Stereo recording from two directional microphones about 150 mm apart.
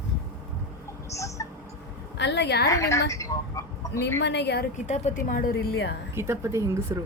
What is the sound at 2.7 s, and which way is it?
A woman's voice, 20° left (ahead or behind).